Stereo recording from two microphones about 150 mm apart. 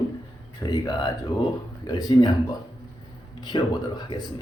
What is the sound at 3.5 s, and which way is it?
Speech, 25° left (ahead or behind).